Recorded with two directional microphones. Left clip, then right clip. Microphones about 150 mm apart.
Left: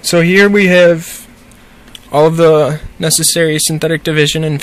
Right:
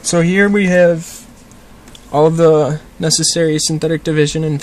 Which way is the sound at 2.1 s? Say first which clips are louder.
Left 2 dB; 10° left (ahead or behind).